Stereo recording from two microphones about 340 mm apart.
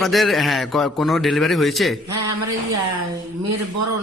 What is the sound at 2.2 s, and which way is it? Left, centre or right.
Speech, right.